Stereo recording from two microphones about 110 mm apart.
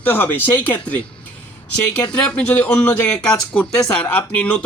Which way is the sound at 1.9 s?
10° left (ahead or behind).